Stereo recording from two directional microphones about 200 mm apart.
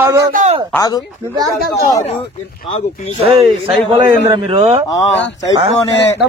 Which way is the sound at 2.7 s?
30° left (ahead or behind).